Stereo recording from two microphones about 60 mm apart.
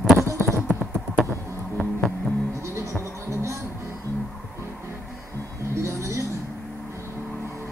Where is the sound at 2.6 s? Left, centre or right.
Right.